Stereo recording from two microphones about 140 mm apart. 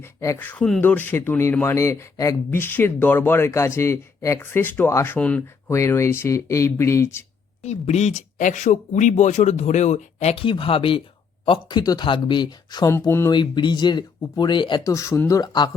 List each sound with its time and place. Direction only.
0.0 s speech: 20° left (ahead or behind)
0.3 s speech: 10° left (ahead or behind)
7.6 s speech: 50° left (ahead or behind); by 12.9 s 30° left (ahead or behind)
12.9 s speech: 20° left (ahead or behind)
13.3 s speech: 35° left (ahead or behind)
14.9 s speech: 20° left (ahead or behind)